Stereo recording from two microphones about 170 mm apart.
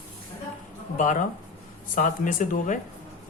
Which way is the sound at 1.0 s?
50° left (ahead or behind).